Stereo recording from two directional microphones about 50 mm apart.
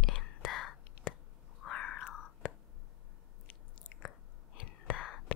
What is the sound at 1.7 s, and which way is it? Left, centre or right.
Cat, centre.